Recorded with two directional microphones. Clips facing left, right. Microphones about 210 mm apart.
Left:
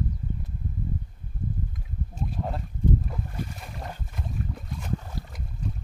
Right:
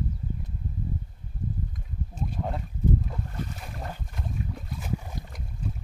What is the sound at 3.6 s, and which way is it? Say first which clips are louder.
Boat: even; centre (ahead or behind).